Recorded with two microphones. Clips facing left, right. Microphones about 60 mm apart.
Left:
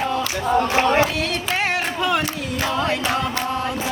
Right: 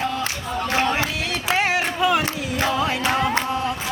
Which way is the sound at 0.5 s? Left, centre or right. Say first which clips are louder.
Left 5 dB; left.